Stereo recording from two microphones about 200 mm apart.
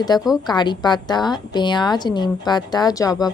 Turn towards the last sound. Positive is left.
turn(degrees=20)  # may be behind; listen again after turning